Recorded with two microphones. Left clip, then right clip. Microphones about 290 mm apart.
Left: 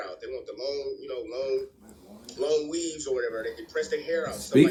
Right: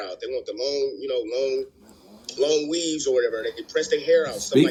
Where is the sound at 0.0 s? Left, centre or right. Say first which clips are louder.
Right 6 dB; right.